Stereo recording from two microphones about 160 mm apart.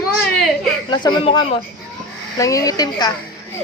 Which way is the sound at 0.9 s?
30° left (ahead or behind).